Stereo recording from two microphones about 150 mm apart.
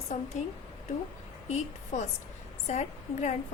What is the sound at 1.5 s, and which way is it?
A woman's voice, 50° left (ahead or behind).